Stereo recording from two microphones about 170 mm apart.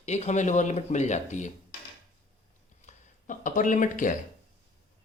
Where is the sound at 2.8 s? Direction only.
50° left (ahead or behind).